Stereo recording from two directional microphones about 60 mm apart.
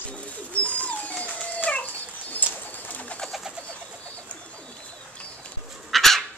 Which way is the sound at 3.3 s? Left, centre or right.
Centre.